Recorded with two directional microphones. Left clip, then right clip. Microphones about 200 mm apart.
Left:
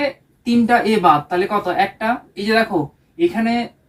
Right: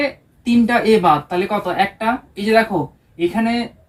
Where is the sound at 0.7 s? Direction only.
20° right (ahead or behind).